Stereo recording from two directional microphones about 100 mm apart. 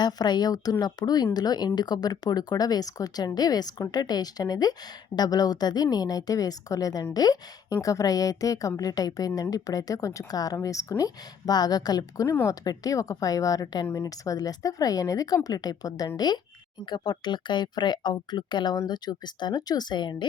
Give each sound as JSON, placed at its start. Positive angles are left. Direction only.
{"t": 0.0, "sound": "a woman's voice", "side_deg": 45}